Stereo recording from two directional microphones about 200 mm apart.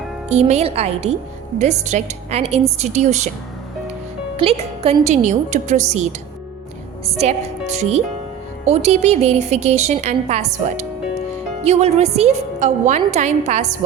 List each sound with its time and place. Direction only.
0.3 s a woman's voice: 35° right (ahead or behind)
4.4 s a woman's voice: 30° right (ahead or behind)
7.2 s a woman's voice: 35° right (ahead or behind)